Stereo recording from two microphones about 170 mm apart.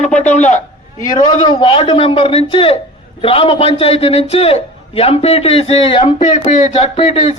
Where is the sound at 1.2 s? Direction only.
25° left (ahead or behind).